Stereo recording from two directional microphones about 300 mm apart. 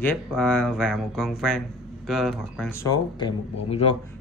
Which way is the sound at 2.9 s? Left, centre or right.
Centre.